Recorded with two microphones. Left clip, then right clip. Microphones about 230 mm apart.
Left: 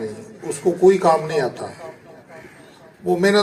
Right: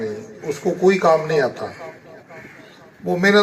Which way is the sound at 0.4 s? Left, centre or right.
Centre.